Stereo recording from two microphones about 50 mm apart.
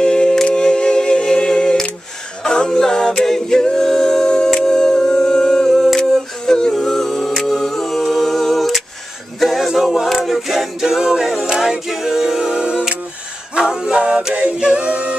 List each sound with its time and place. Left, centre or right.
0.0 s camera: centre
2.4 s a capella: centre
5.7 s a sound: centre
6.1 s a capella: centre
9.4 s music: centre
9.7 s a capella: centre
14.6 s music: right